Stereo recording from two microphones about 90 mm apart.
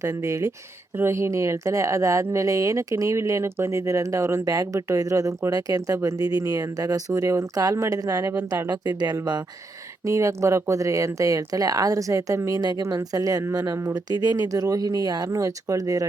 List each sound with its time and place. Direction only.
0.0 s speech: 40° right (ahead or behind)
8.7 s speech: 50° right (ahead or behind)
10.0 s speech: 35° right (ahead or behind)